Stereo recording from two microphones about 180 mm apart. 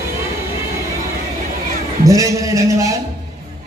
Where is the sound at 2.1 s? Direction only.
15° right (ahead or behind).